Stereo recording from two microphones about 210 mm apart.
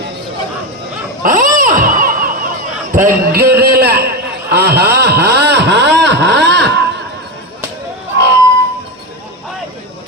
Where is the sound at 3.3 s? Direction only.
45° right (ahead or behind).